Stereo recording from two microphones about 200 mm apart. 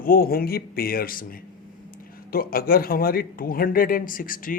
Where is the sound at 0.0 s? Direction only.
45° left (ahead or behind).